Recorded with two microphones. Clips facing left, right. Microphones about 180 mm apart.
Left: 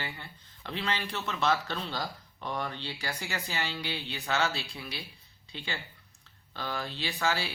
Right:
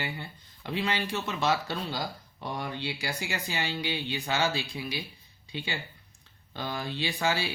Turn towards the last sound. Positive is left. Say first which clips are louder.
# right 2 dB
turn(degrees=-15)  # may be behind; listen again after turning